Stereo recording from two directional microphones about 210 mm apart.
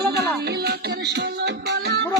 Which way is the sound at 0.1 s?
50° right (ahead or behind).